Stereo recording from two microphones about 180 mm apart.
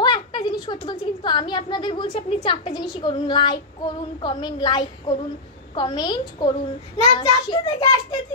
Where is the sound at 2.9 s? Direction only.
25° left (ahead or behind).